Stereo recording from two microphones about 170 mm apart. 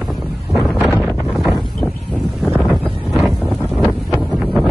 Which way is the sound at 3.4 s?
5° right (ahead or behind).